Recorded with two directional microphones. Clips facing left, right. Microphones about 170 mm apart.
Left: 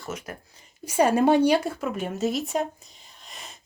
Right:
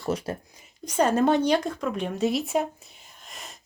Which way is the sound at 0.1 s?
35° right (ahead or behind).